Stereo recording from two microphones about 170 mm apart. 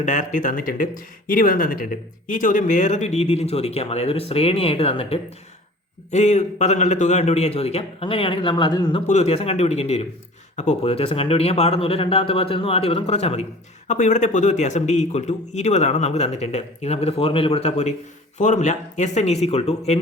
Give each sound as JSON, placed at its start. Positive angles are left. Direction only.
{"t": 0.0, "sound": "speech", "side_deg": 50}
{"t": 9.0, "sound": "speech", "side_deg": 40}